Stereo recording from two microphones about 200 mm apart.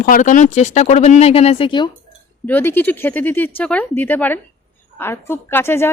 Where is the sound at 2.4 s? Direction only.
10° left (ahead or behind).